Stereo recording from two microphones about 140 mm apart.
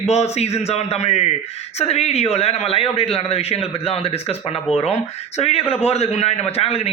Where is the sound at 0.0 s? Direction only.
50° left (ahead or behind).